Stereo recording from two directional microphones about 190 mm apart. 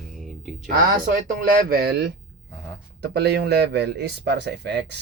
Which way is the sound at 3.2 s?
60° right (ahead or behind).